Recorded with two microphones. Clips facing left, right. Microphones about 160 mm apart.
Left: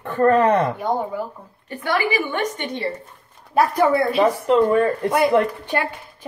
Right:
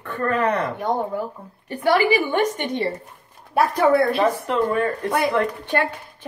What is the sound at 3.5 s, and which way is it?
Speech, centre (ahead or behind).